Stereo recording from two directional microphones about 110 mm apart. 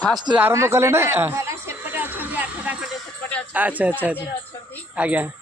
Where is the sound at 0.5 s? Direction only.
25° right (ahead or behind).